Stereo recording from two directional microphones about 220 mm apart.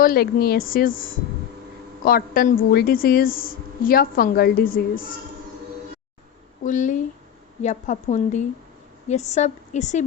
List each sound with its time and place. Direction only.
0.0 s a woman's voice: 40° left (ahead or behind)
6.7 s a woman's voice: 35° left (ahead or behind)